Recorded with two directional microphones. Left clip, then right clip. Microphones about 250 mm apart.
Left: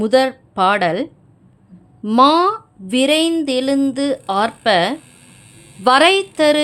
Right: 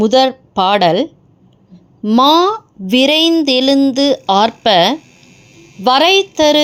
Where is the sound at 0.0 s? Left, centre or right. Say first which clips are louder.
Right 4 dB; centre.